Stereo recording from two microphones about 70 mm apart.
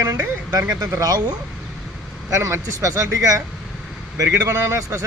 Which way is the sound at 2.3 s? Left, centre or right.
Right.